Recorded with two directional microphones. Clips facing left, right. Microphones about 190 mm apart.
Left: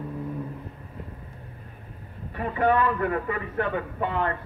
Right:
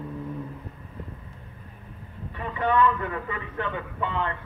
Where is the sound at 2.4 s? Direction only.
40° left (ahead or behind).